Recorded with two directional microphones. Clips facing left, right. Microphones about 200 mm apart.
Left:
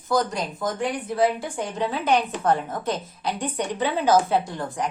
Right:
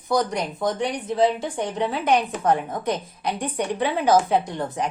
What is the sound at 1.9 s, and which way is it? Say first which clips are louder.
A woman's voice: even; 10° right (ahead or behind).